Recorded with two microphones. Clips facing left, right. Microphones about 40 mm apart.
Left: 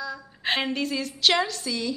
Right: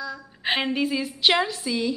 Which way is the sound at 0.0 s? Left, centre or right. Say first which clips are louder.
Right 1 dB; centre.